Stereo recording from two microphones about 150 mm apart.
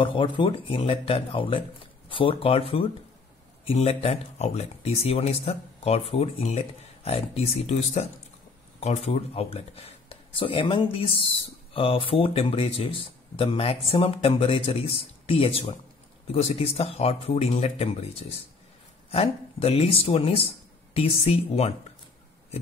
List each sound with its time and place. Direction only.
0.0 s speech: 35° left (ahead or behind)